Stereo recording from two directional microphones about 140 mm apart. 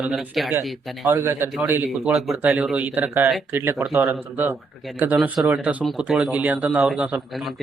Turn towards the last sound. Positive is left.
turn(degrees=-5)  # may be behind; listen again after turning